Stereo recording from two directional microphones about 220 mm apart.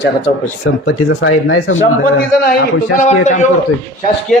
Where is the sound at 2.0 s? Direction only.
45° left (ahead or behind).